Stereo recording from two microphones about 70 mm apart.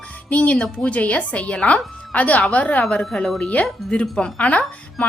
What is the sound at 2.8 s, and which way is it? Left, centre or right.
A woman's voice, centre.